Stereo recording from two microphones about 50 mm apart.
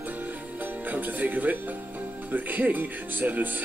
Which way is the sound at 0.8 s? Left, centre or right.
Right.